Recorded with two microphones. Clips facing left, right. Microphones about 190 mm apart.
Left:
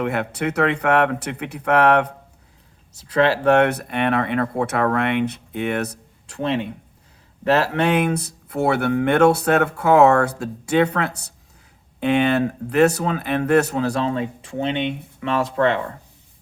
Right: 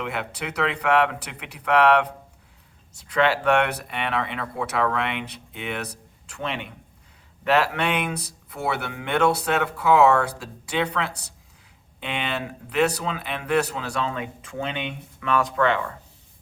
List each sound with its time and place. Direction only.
0.0 s speech: 45° left (ahead or behind)
6.2 s speech: 35° left (ahead or behind)